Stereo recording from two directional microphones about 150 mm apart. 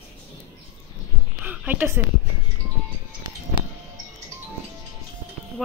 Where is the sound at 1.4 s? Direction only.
10° right (ahead or behind).